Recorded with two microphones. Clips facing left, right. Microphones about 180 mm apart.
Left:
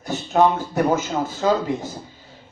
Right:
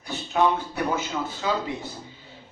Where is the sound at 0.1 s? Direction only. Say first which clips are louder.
Left 5 dB; 45° left (ahead or behind).